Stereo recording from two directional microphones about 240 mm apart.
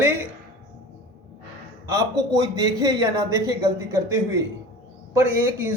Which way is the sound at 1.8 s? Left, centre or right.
Centre.